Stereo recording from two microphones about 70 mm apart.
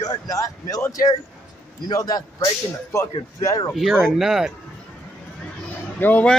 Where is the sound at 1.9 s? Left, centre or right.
Left.